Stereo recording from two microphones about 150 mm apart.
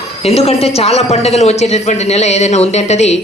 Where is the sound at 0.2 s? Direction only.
45° left (ahead or behind).